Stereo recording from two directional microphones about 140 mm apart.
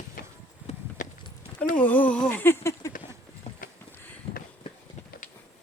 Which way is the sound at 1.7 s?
10° left (ahead or behind).